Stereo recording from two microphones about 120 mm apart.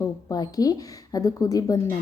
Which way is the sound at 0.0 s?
30° left (ahead or behind).